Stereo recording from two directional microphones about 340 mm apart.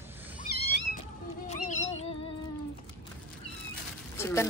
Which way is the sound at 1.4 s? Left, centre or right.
Left.